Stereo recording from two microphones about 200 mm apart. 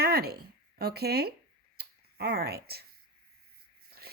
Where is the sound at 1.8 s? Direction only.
55° right (ahead or behind).